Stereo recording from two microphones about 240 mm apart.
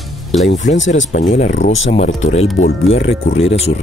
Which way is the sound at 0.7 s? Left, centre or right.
Left.